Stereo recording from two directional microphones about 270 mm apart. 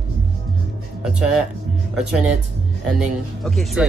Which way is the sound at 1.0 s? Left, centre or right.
Centre.